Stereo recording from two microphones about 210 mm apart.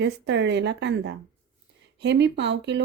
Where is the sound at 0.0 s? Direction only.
55° right (ahead or behind).